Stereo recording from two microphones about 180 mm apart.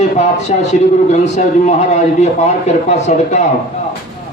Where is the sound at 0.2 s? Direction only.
40° left (ahead or behind).